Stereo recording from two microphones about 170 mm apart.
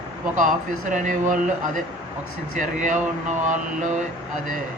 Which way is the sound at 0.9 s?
45° right (ahead or behind).